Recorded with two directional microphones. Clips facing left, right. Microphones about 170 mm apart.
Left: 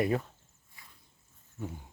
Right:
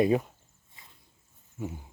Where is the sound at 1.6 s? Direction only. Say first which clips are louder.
Right 3 dB; 10° right (ahead or behind).